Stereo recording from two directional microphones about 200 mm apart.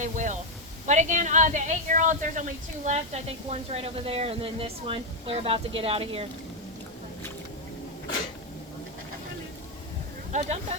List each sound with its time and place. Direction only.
0.0 s a sound: 40° right (ahead or behind)
0.9 s a woman's voice: 35° right (ahead or behind)
10.3 s speech: 35° right (ahead or behind)